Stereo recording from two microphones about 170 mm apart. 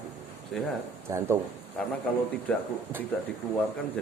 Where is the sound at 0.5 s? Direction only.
Centre (ahead or behind).